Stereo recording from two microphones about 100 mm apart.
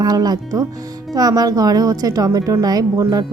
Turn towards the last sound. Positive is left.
turn(degrees=-40)  # may be behind; listen again after turning